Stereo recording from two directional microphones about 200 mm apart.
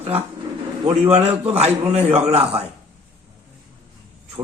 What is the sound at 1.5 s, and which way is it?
A man's voice, 30° right (ahead or behind).